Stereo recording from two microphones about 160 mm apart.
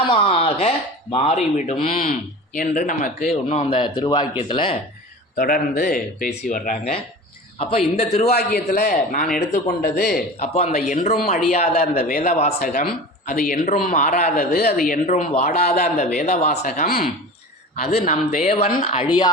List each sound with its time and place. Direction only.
0.1 s a man's voice: 35° left (ahead or behind)
1.4 s a man's voice: 50° left (ahead or behind); by 4.8 s 30° left (ahead or behind)
5.4 s speech: 70° left (ahead or behind)
7.6 s a man's voice: 35° left (ahead or behind)
8.4 s a man's voice: 85° left; by 9.3 s 65° left (ahead or behind)
9.6 s a man's voice: 85° left
10.4 s speech: 40° left (ahead or behind); by 11.3 s 65° left (ahead or behind)
11.5 s a man's voice: 40° left (ahead or behind)
12.5 s speech: 65° left (ahead or behind)
14.8 s speech: 55° left (ahead or behind)
15.3 s speech: 40° left (ahead or behind)
16.6 s a man's voice: 70° left (ahead or behind)
17.9 s a man's voice: 40° left (ahead or behind)